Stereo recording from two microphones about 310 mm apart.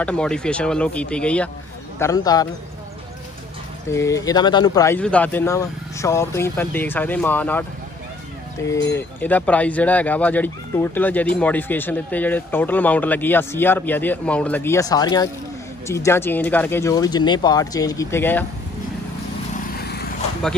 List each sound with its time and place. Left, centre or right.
0.0 s speech: centre
3.9 s speech: centre
8.6 s speech: centre
19.5 s vehicle: left